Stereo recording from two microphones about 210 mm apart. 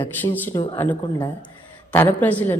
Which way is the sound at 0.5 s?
20° left (ahead or behind).